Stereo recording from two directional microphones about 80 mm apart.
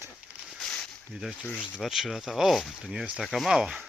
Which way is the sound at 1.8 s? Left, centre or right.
Centre.